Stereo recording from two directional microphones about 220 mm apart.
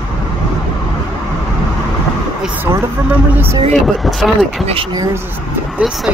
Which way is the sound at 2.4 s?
10° right (ahead or behind).